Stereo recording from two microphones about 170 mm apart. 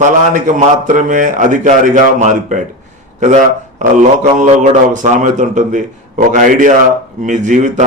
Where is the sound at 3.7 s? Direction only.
45° right (ahead or behind).